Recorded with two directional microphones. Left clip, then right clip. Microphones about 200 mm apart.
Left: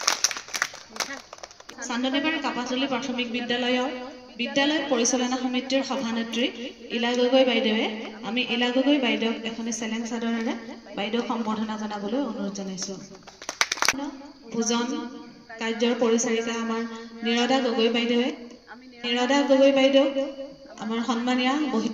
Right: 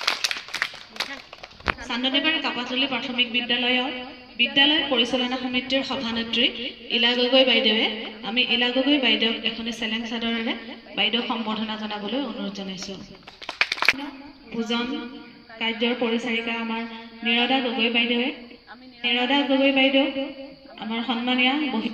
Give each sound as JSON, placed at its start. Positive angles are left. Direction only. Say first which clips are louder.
{"t": 0.0, "sound": "crumpling", "louder": "right 1 dB", "side_deg": 55}
{"t": 1.8, "sound": "a woman's voice", "louder": "even", "side_deg": 60}
{"t": 14.6, "sound": "a woman's voice", "louder": "left 1 dB", "side_deg": 35}